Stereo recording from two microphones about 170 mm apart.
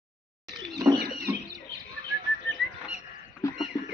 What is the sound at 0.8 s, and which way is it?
Rodents, 20° right (ahead or behind).